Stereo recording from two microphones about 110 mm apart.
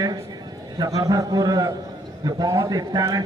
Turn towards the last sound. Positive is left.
turn(degrees=-35)  # may be behind; listen again after turning